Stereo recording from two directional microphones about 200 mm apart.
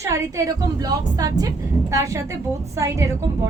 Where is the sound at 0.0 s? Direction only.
15° right (ahead or behind).